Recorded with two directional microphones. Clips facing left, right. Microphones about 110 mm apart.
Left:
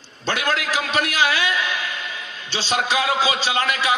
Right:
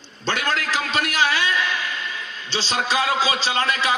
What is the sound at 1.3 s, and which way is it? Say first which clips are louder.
Speech: even; 40° right (ahead or behind).